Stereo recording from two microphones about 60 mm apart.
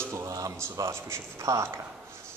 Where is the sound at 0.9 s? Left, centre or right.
Right.